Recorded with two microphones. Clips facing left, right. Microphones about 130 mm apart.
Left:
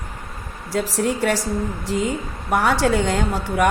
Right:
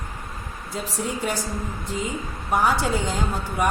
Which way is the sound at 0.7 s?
75° left (ahead or behind).